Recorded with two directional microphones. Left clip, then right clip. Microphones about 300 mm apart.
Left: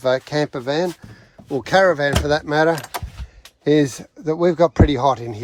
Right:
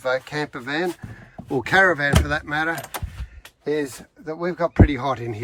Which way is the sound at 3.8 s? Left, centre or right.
Left.